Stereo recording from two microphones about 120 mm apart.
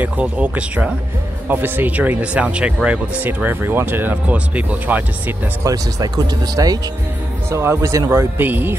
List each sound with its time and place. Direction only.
0.0 s speech: 10° right (ahead or behind)
5.6 s speech: 30° right (ahead or behind)
7.4 s speech: 20° right (ahead or behind)